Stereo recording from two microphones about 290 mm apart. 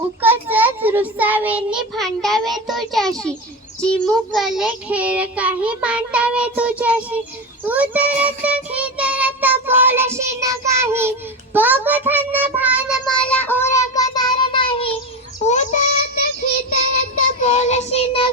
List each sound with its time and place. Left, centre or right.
0.2 s a child's voice: centre
7.6 s child singing: centre